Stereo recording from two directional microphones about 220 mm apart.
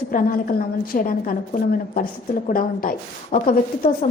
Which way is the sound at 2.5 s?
40° left (ahead or behind).